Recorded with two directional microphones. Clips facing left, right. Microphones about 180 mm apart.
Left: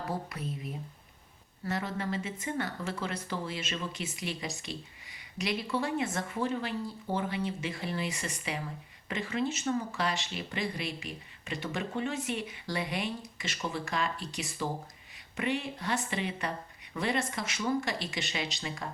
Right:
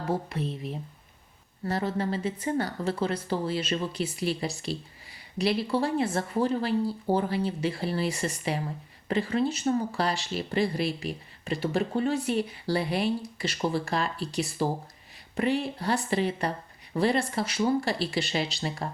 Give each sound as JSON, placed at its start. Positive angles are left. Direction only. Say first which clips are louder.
{"t": 0.1, "sound": "speech", "louder": "right 11 dB", "side_deg": -25}
{"t": 1.6, "sound": "speech", "louder": "right 5 dB", "side_deg": -30}